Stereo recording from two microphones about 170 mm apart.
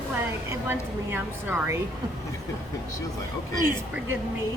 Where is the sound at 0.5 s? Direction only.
10° right (ahead or behind).